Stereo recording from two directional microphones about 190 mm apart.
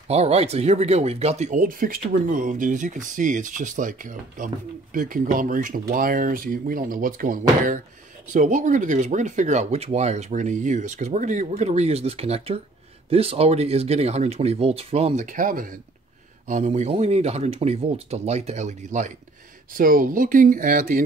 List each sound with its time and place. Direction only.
0.1 s speech: 35° right (ahead or behind)